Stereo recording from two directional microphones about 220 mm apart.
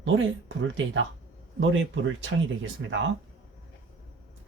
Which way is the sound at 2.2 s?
55° right (ahead or behind).